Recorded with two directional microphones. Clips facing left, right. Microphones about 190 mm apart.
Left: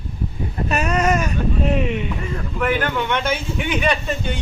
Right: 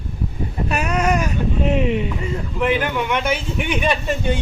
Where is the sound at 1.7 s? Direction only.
25° right (ahead or behind).